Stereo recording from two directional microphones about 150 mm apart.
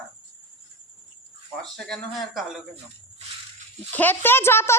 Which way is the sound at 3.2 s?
45° right (ahead or behind).